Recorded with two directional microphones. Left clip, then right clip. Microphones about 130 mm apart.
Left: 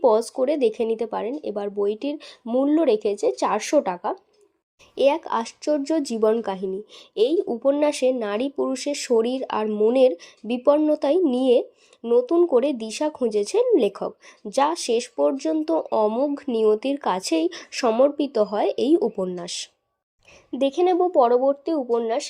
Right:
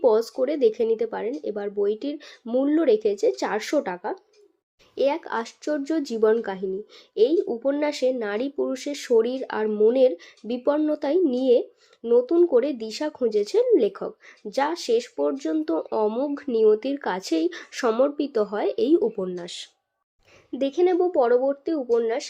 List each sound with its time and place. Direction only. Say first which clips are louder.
0.0 s speech: left 1 dB; 25° left (ahead or behind)